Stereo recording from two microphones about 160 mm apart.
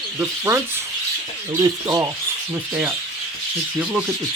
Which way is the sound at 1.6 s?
20° right (ahead or behind).